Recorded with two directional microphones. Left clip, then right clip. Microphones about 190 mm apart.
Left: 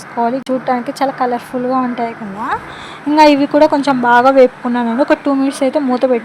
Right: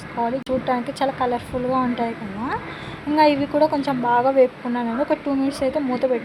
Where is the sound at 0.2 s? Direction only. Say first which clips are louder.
Left 7 dB; 25° left (ahead or behind).